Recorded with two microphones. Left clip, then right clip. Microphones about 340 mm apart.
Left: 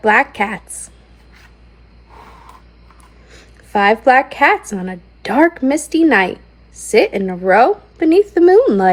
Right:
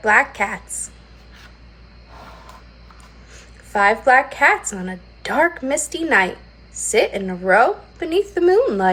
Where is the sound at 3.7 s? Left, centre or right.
Left.